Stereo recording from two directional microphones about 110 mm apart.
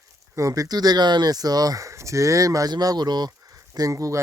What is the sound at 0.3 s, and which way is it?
Speech, 30° right (ahead or behind).